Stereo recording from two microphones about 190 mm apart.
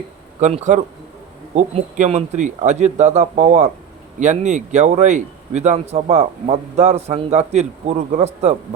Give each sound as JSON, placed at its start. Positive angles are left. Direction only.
{"t": 0.3, "sound": "a man's voice", "side_deg": -40}